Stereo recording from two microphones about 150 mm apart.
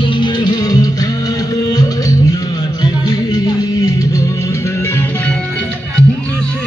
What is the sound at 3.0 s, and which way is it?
Music, 25° left (ahead or behind).